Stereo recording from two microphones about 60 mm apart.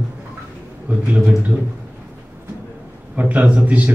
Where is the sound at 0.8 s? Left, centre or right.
Right.